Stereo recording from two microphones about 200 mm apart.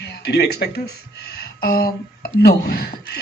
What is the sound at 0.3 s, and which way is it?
A woman's voice, 55° left (ahead or behind).